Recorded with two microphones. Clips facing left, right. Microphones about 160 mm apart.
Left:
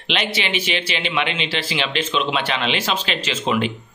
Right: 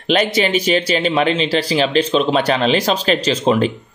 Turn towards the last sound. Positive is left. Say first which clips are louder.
# right 6 dB
turn(degrees=-40)  # may be behind; listen again after turning